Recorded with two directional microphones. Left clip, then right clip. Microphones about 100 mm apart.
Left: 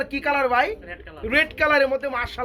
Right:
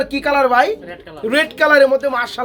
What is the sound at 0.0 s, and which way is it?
Speech, 5° right (ahead or behind).